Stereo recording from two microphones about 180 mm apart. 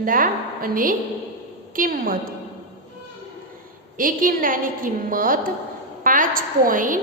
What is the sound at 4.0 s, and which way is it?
A woman's voice, 50° right (ahead or behind).